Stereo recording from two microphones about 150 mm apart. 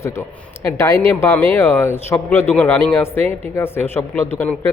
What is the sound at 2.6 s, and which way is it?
A man's voice, 10° left (ahead or behind).